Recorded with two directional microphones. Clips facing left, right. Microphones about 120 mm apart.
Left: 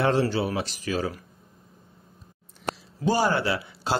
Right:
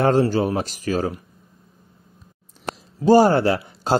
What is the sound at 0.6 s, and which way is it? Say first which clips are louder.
Speech: right 5 dB; 40° right (ahead or behind).